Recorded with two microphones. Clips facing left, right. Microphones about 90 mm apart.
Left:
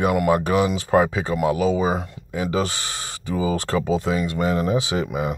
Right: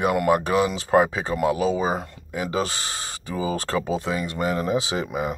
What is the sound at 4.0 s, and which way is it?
Speech, 30° right (ahead or behind).